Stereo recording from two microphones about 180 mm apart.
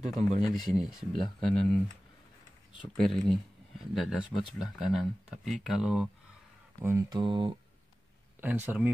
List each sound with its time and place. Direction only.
0.4 s speech: centre (ahead or behind)
3.0 s speech: centre (ahead or behind)
6.8 s speech: 15° right (ahead or behind)
8.4 s speech: 10° right (ahead or behind)